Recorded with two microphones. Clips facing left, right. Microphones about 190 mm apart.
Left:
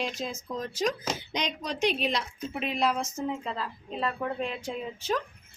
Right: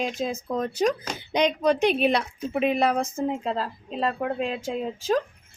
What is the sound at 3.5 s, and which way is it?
Speech, 40° right (ahead or behind).